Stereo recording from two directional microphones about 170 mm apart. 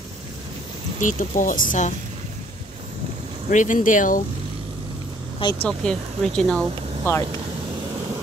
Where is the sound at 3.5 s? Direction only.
50° left (ahead or behind).